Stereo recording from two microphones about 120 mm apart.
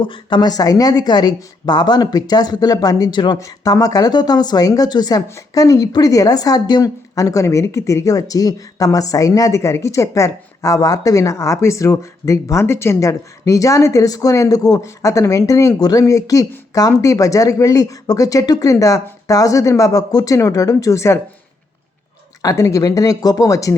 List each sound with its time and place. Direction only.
0.0 s a woman's voice: 40° left (ahead or behind); by 21.2 s 25° left (ahead or behind)
22.4 s a woman's voice: 30° left (ahead or behind)